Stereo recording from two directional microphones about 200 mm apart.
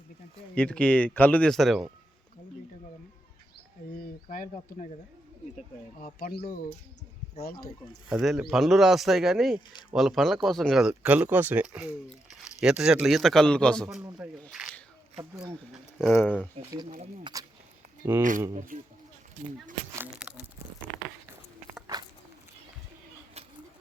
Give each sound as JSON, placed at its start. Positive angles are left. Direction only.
{"t": 0.5, "sound": "speech", "side_deg": 5}
{"t": 3.9, "sound": "a sound", "side_deg": 45}
{"t": 6.0, "sound": "speech", "side_deg": 45}
{"t": 6.3, "sound": "speech", "side_deg": 25}
{"t": 7.4, "sound": "speech", "side_deg": 50}
{"t": 8.1, "sound": "speech", "side_deg": 0}
{"t": 15.7, "sound": "speech", "side_deg": 0}
{"t": 17.3, "sound": "speech", "side_deg": -25}
{"t": 18.2, "sound": "speech", "side_deg": -40}
{"t": 20.0, "sound": "a sound", "side_deg": -5}